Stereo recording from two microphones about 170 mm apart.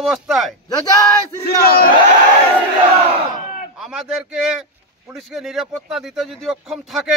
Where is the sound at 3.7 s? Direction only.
5° right (ahead or behind).